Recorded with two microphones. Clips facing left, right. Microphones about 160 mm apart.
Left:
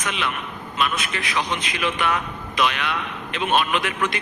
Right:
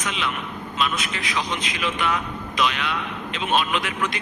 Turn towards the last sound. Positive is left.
turn(degrees=60)  # may be behind; listen again after turning